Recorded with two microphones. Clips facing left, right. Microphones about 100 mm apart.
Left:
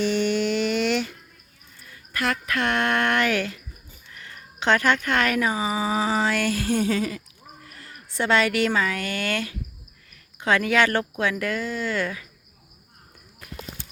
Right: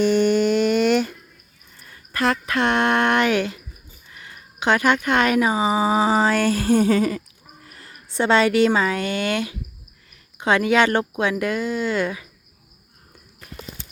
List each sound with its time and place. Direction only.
0.0 s a sound: 45° right (ahead or behind)
1.8 s speech: 35° right (ahead or behind)
7.6 s a woman's voice: 30° right (ahead or behind)